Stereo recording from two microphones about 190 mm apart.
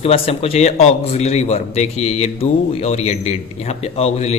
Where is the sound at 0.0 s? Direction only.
30° left (ahead or behind).